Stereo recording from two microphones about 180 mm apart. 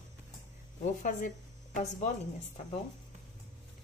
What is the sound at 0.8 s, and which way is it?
Speech, 45° left (ahead or behind).